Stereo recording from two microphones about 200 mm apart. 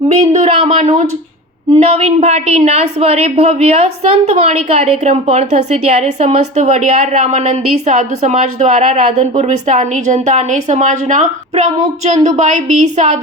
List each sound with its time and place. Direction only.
0.1 s a woman's voice: 35° right (ahead or behind)